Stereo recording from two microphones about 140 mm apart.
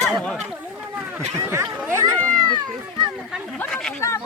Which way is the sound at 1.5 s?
20° right (ahead or behind).